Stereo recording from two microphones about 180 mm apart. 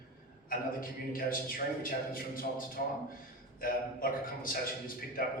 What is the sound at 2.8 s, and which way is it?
A man's voice, 55° left (ahead or behind).